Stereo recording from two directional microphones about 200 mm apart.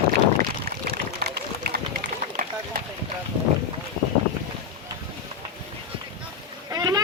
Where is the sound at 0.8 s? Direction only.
55° right (ahead or behind).